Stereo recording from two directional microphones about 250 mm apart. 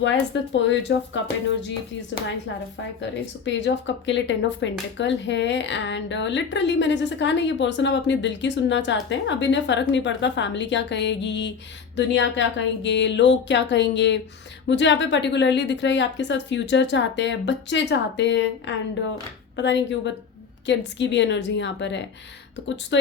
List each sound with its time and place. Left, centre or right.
0.0 s speech: left
3.4 s speech: left